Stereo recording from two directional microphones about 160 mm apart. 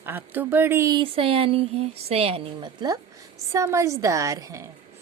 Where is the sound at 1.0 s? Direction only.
35° right (ahead or behind).